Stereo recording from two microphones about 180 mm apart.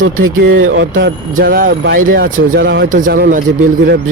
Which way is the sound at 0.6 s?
85° right.